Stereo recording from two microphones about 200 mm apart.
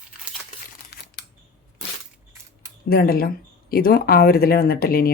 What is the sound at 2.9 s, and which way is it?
Speech, 50° left (ahead or behind).